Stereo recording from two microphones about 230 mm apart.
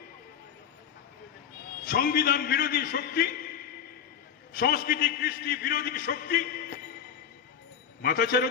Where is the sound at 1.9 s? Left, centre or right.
Left.